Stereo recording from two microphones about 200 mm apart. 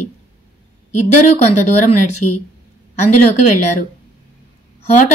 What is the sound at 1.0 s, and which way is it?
Speech, 35° left (ahead or behind).